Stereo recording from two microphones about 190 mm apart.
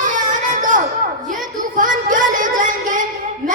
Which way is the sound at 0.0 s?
45° right (ahead or behind).